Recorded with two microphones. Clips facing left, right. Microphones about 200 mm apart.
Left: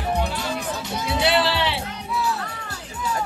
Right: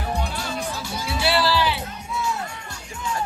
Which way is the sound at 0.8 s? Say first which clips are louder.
Left 3 dB; 20° left (ahead or behind).